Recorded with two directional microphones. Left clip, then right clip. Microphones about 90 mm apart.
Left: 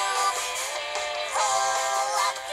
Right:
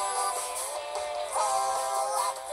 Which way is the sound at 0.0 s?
35° left (ahead or behind).